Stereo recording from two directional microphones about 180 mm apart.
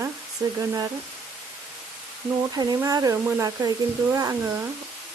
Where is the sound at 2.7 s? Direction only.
20° right (ahead or behind).